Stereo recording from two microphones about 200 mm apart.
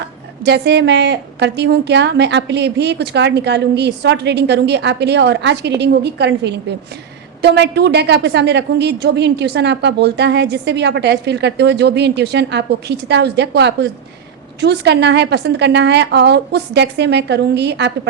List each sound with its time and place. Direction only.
0.4 s a woman's voice: 60° right (ahead or behind)